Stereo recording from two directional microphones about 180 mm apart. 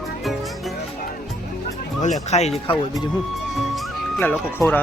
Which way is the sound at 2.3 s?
40° left (ahead or behind).